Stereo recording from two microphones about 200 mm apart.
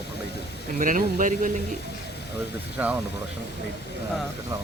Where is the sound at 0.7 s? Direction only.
40° right (ahead or behind).